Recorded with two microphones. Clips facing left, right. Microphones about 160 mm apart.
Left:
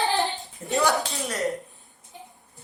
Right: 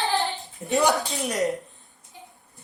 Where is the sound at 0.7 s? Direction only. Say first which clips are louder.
Right 2 dB; 20° right (ahead or behind).